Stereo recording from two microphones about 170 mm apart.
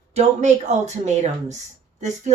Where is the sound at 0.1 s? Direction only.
40° right (ahead or behind).